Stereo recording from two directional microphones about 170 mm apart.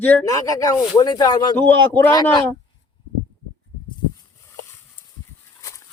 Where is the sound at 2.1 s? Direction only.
25° left (ahead or behind).